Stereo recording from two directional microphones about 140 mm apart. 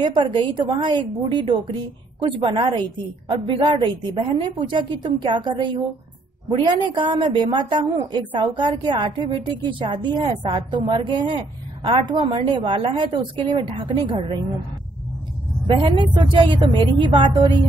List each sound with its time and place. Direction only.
0.0 s a woman's voice: 35° right (ahead or behind)
15.6 s a woman's voice: 35° right (ahead or behind)